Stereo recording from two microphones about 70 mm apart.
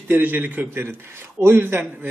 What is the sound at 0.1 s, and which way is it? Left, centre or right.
A man's voice, right.